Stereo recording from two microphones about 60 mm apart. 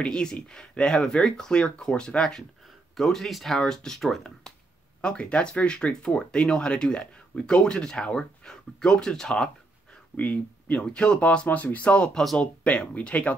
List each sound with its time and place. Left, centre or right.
0.0 s speech: centre
5.0 s speech: centre
10.1 s speech: left